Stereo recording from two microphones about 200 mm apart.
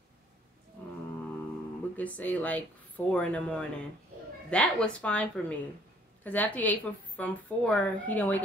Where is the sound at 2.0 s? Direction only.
5° left (ahead or behind).